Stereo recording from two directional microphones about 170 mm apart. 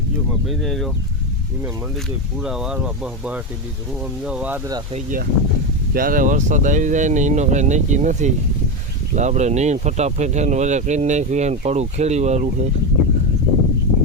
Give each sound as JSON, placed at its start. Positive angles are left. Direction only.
{"t": 0.4, "sound": "speech", "side_deg": 0}
{"t": 2.4, "sound": "speech", "side_deg": -5}
{"t": 4.9, "sound": "speech", "side_deg": -55}